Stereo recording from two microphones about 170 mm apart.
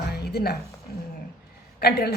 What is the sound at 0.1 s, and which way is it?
Music, 70° left (ahead or behind).